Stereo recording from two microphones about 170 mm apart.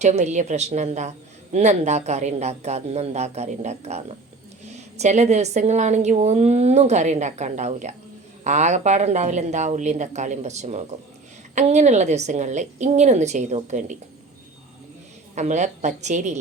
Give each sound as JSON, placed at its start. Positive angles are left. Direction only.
{"t": 0.0, "sound": "a woman's voice", "side_deg": -40}
{"t": 15.4, "sound": "speech", "side_deg": -45}